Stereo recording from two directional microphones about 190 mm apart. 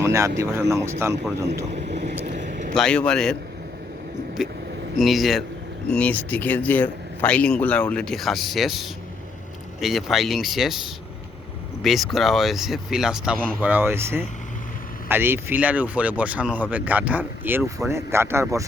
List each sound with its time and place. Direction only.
0.0 s speech: 15° right (ahead or behind)
1.7 s vehicle: 65° right (ahead or behind)
2.1 s vehicle: 40° right (ahead or behind)
2.7 s speech: 5° left (ahead or behind)
4.4 s speech: centre (ahead or behind)